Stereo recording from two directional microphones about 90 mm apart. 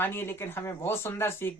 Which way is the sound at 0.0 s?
25° left (ahead or behind).